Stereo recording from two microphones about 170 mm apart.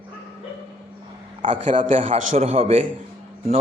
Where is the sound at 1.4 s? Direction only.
45° right (ahead or behind).